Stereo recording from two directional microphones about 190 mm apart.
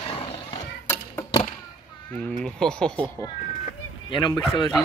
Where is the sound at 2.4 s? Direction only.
5° left (ahead or behind).